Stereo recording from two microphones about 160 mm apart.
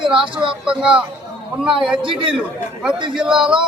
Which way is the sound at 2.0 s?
30° right (ahead or behind).